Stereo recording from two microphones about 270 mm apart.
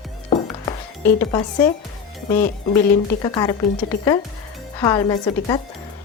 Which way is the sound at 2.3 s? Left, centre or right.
Centre.